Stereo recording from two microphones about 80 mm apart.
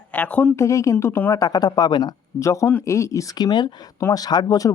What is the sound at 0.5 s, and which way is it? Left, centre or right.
Speech, left.